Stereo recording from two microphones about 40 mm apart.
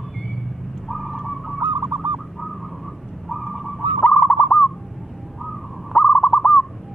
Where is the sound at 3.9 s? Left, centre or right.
Centre.